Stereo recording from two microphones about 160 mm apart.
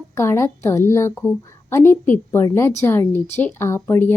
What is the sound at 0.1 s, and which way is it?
A woman's voice, 15° left (ahead or behind).